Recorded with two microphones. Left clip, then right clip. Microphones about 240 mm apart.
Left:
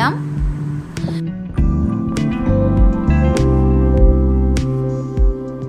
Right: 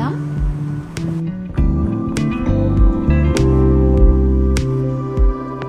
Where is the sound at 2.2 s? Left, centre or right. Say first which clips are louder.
Left 3 dB; centre.